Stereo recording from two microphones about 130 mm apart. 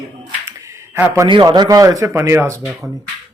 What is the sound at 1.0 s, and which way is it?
Speech, 15° right (ahead or behind).